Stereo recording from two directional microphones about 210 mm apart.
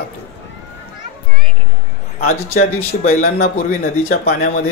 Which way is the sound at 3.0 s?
35° left (ahead or behind).